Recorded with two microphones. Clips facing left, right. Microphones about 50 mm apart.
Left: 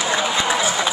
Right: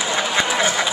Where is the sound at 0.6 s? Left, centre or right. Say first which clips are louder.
Right 1 dB; right.